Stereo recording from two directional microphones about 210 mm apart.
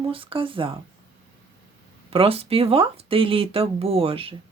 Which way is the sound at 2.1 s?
25° right (ahead or behind).